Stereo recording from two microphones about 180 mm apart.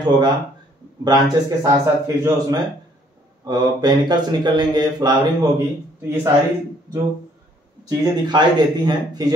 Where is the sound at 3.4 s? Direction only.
25° right (ahead or behind).